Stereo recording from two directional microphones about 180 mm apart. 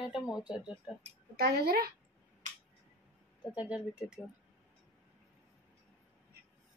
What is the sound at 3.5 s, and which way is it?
Speech, 5° right (ahead or behind).